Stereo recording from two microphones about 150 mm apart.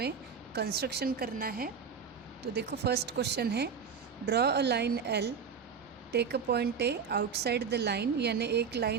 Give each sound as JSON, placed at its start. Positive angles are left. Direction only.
{"t": 0.5, "sound": "a woman's voice", "side_deg": -90}
{"t": 2.5, "sound": "a woman's voice", "side_deg": -90}